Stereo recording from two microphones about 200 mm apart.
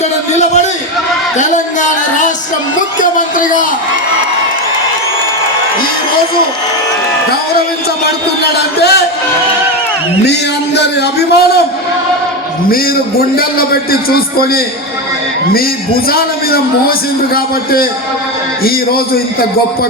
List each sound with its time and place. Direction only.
1.4 s a sound: 35° left (ahead or behind)
3.0 s a sound: 40° left (ahead or behind)
8.8 s a man's voice: 55° left (ahead or behind)
10.8 s a man's voice: 55° left (ahead or behind)
13.3 s a man's voice: 50° left (ahead or behind)
16.0 s a man's voice: 50° left (ahead or behind)